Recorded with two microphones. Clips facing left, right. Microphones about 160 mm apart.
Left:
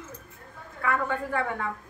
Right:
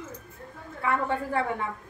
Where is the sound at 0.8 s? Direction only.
30° right (ahead or behind).